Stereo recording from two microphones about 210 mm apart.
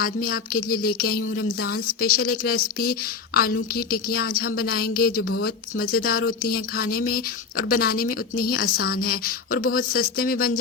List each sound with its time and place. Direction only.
0.0 s speech: 45° left (ahead or behind)